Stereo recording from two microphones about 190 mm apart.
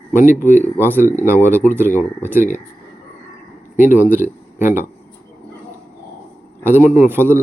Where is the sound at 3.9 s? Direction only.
10° right (ahead or behind).